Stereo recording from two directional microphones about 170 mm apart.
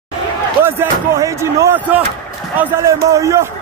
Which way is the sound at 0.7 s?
15° right (ahead or behind).